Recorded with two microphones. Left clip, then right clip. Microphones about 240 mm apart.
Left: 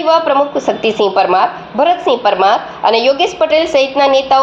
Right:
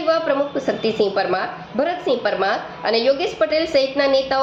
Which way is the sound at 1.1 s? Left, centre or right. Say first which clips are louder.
Left 10 dB; left.